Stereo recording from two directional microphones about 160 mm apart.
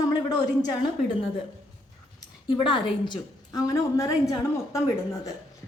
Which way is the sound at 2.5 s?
30° left (ahead or behind).